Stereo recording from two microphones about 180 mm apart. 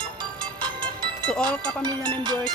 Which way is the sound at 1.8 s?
25° right (ahead or behind).